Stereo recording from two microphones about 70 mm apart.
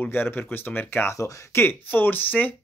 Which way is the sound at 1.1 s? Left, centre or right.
Left.